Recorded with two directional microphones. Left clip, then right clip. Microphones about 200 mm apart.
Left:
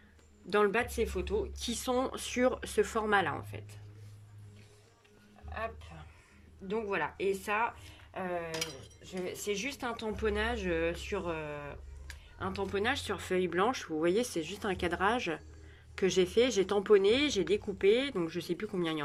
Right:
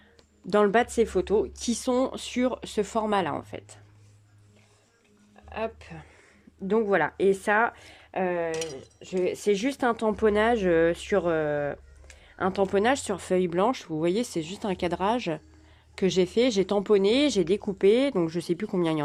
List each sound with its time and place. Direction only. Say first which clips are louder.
0.4 s speech: right 7 dB; 30° right (ahead or behind)
5.5 s speech: right 7 dB; 50° right (ahead or behind); by 19.0 s 30° right (ahead or behind)